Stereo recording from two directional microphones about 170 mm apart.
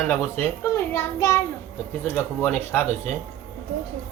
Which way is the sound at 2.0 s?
10° left (ahead or behind).